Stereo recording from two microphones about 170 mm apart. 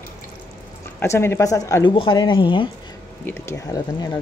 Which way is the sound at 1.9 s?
30° left (ahead or behind).